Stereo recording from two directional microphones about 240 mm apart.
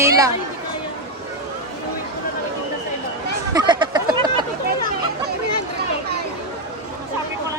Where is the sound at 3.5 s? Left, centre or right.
Centre.